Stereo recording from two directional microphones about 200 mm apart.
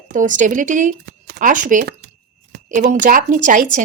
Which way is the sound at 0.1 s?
40° right (ahead or behind).